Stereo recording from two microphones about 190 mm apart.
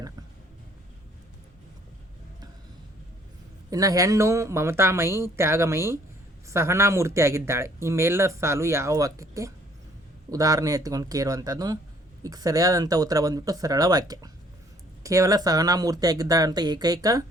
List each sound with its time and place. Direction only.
3.7 s speech: 20° right (ahead or behind)